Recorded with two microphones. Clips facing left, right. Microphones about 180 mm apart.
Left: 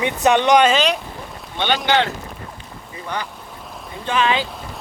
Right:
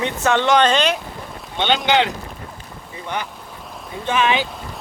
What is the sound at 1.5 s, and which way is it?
Speech, 20° right (ahead or behind).